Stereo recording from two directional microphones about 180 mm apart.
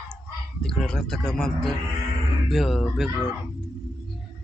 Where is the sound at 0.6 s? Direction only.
5° left (ahead or behind).